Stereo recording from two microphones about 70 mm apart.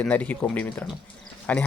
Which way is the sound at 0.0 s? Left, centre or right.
Left.